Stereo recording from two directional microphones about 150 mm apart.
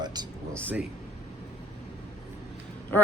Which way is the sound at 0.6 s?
10° right (ahead or behind).